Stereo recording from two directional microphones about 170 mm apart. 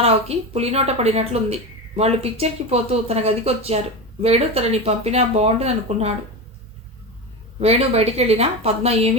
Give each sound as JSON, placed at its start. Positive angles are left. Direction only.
{"t": 0.0, "sound": "speech", "side_deg": -35}
{"t": 7.6, "sound": "speech", "side_deg": -35}